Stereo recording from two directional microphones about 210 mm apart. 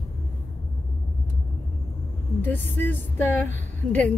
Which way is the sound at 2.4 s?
10° left (ahead or behind).